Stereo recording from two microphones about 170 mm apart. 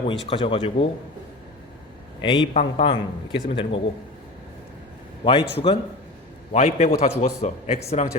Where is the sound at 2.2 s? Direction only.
25° left (ahead or behind).